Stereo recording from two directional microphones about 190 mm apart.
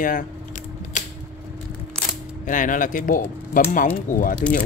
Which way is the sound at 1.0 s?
40° left (ahead or behind).